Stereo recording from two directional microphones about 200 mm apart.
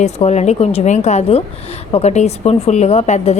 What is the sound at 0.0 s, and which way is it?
A woman's voice, 35° left (ahead or behind).